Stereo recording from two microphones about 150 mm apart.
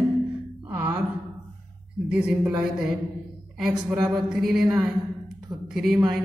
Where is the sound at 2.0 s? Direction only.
5° right (ahead or behind).